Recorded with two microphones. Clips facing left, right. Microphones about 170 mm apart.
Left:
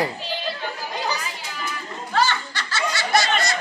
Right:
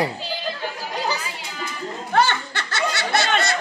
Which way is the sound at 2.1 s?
60° right (ahead or behind).